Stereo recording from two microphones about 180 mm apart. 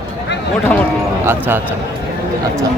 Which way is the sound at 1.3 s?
10° right (ahead or behind).